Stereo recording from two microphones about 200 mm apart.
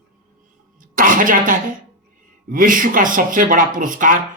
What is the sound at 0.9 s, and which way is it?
Speech, 40° right (ahead or behind).